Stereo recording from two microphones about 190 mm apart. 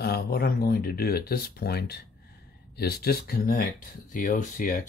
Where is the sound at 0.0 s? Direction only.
55° left (ahead or behind).